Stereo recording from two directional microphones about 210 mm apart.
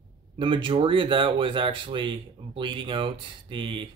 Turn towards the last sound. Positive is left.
turn(degrees=-25)  # may be behind; listen again after turning